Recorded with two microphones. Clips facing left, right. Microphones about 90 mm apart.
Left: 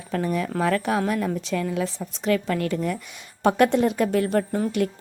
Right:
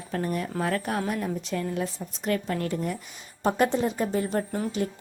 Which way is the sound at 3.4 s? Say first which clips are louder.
Left 5 dB; 75° left (ahead or behind).